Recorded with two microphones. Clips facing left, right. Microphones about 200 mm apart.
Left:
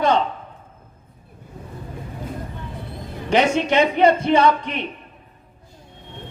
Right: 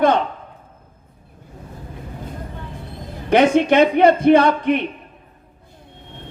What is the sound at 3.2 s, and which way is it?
A man's voice, 55° right (ahead or behind).